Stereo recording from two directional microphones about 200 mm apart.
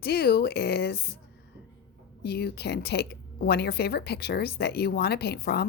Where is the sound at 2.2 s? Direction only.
55° left (ahead or behind).